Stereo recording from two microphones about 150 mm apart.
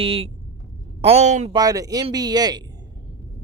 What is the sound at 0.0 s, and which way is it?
Speech, 40° right (ahead or behind).